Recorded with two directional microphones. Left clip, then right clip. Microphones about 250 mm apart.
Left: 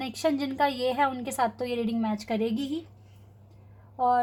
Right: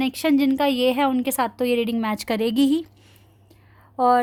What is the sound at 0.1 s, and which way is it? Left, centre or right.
Speech, right.